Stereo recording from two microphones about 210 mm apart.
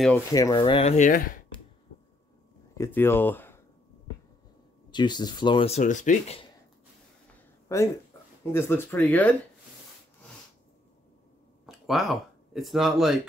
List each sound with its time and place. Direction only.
0.3 s speech: 15° left (ahead or behind); by 1.4 s 40° left (ahead or behind)
2.7 s speech: 10° left (ahead or behind)
4.9 s speech: 20° left (ahead or behind)
7.6 s speech: 15° left (ahead or behind)
11.6 s speech: centre (ahead or behind)